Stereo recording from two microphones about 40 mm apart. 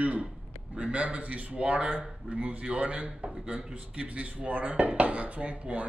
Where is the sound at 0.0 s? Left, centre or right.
Right.